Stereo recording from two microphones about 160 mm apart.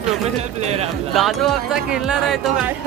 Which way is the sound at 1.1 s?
Centre (ahead or behind).